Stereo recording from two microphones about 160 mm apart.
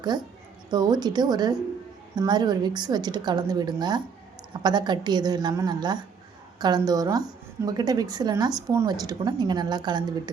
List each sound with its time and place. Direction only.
0.0 s a woman's voice: 25° right (ahead or behind)